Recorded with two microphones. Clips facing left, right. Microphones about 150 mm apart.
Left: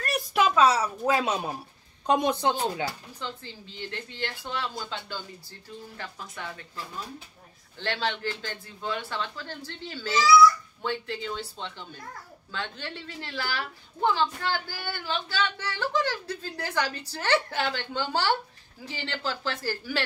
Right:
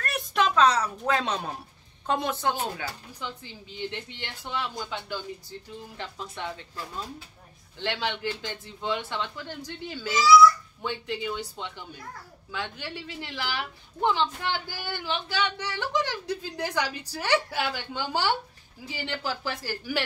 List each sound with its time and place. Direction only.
0.0 s a woman's voice: 5° left (ahead or behind)
3.2 s a woman's voice: 15° right (ahead or behind)
7.8 s a woman's voice: 15° right (ahead or behind)